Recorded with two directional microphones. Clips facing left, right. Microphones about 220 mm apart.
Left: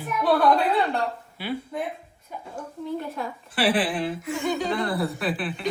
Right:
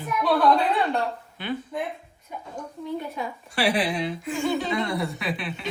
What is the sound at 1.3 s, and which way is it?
A woman's voice, 5° left (ahead or behind).